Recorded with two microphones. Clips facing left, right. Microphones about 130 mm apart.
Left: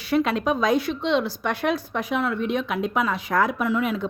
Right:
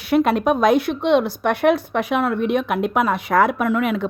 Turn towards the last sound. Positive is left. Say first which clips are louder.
# right 4 dB
turn(degrees=-65)  # may be behind; listen again after turning